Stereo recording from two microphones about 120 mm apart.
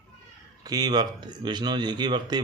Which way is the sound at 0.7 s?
35° right (ahead or behind).